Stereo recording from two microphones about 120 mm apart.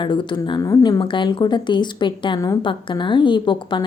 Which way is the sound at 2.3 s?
30° left (ahead or behind).